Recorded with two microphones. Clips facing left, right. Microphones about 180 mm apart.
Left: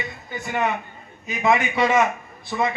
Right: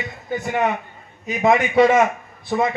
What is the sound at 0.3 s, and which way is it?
A man's voice, 45° right (ahead or behind).